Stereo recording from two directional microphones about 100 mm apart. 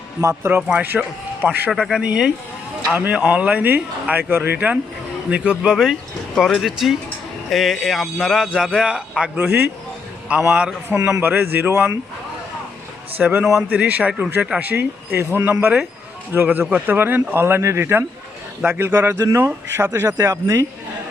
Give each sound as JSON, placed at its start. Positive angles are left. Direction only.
{"t": 0.2, "sound": "speech", "side_deg": -25}
{"t": 1.7, "sound": "a man's voice", "side_deg": -5}
{"t": 13.1, "sound": "a man's voice", "side_deg": -15}
{"t": 13.4, "sound": "a man's voice", "side_deg": -5}
{"t": 13.7, "sound": "speech", "side_deg": -15}
{"t": 19.2, "sound": "speech", "side_deg": -35}